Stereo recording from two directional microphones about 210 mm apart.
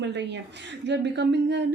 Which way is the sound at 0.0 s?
55° right (ahead or behind).